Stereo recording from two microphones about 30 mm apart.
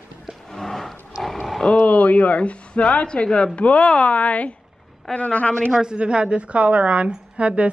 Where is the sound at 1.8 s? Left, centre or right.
Left.